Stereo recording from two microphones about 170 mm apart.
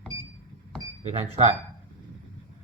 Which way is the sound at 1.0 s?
40° right (ahead or behind).